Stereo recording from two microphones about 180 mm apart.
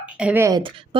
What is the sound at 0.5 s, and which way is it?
Speech, 30° right (ahead or behind).